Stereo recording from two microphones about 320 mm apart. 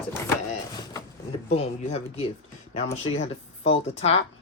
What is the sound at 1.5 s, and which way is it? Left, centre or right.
Speech, centre.